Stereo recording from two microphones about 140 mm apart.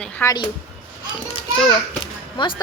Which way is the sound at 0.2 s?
15° left (ahead or behind).